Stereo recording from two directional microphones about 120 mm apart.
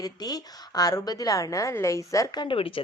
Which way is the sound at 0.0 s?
30° left (ahead or behind).